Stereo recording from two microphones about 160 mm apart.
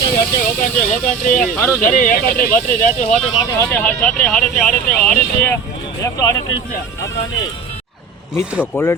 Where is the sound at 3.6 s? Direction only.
10° left (ahead or behind).